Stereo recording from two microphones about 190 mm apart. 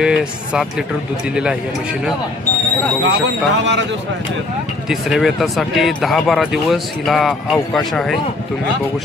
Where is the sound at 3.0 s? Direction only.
70° right (ahead or behind).